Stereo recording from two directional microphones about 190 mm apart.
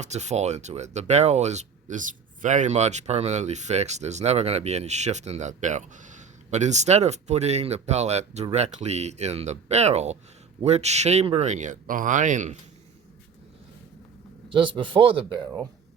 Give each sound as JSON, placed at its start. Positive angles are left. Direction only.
{"t": 0.0, "sound": "speech", "side_deg": -35}
{"t": 14.5, "sound": "speech", "side_deg": -25}